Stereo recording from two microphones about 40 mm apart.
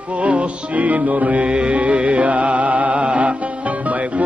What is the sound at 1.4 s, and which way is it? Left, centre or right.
Music, right.